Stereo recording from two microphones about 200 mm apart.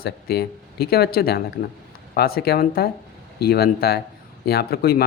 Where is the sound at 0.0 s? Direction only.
50° left (ahead or behind).